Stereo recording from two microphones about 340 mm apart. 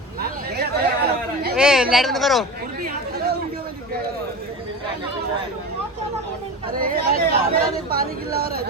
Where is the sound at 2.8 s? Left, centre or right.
Right.